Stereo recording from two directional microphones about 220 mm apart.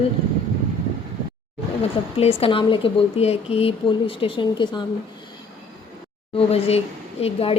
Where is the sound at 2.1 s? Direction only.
25° left (ahead or behind).